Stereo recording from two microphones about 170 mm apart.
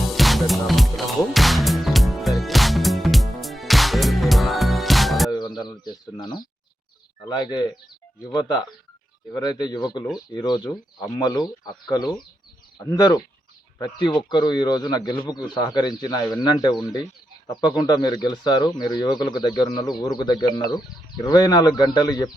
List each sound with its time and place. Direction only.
0.1 s music: centre (ahead or behind)
5.3 s a sound: 25° left (ahead or behind)
7.3 s speech: 25° left (ahead or behind)